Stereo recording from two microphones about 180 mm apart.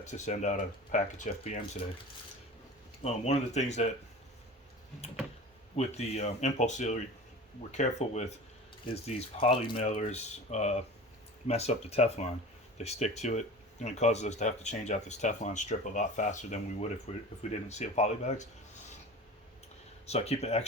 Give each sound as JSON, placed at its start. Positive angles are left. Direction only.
{"t": 0.0, "sound": "speech", "side_deg": 40}
{"t": 3.0, "sound": "speech", "side_deg": 35}
{"t": 5.7, "sound": "speech", "side_deg": 35}
{"t": 9.8, "sound": "speech", "side_deg": 40}
{"t": 20.1, "sound": "speech", "side_deg": 35}